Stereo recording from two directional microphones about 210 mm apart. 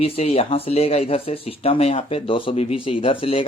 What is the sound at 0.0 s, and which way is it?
Speech, 30° left (ahead or behind).